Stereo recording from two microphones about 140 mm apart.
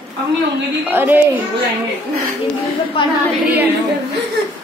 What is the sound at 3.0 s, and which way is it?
Speech, 40° left (ahead or behind).